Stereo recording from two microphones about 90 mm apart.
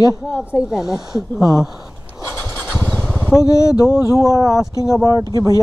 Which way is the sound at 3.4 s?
40° left (ahead or behind).